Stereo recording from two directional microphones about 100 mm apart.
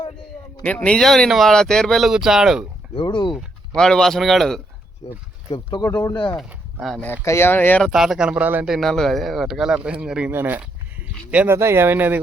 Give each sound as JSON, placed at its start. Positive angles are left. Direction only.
{"t": 0.6, "sound": "speech", "side_deg": 10}
{"t": 2.9, "sound": "speech", "side_deg": 55}
{"t": 3.8, "sound": "speech", "side_deg": 5}
{"t": 5.0, "sound": "speech", "side_deg": 65}
{"t": 6.0, "sound": "speech", "side_deg": 45}
{"t": 7.2, "sound": "speech", "side_deg": 25}
{"t": 7.9, "sound": "speech", "side_deg": -5}
{"t": 8.6, "sound": "speech", "side_deg": -5}
{"t": 10.3, "sound": "speech", "side_deg": -20}
{"t": 11.5, "sound": "speech", "side_deg": -25}